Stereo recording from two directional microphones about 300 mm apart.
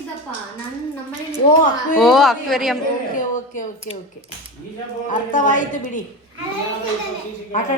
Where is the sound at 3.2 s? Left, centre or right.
Left.